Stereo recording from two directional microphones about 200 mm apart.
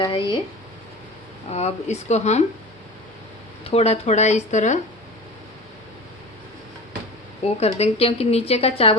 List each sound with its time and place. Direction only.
0.0 s speech: 25° left (ahead or behind)
1.5 s a woman's voice: 35° left (ahead or behind)
3.6 s a woman's voice: 30° left (ahead or behind)
7.4 s a woman's voice: 30° left (ahead or behind)